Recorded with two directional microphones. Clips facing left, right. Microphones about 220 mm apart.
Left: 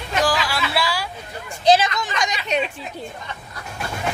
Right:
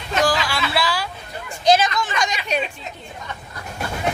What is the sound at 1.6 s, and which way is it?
Speech, 25° left (ahead or behind).